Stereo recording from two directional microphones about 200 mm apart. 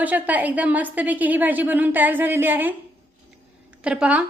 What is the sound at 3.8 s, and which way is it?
Speech, 5° right (ahead or behind).